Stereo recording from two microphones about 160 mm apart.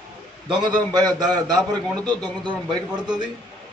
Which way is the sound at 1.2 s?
Centre (ahead or behind).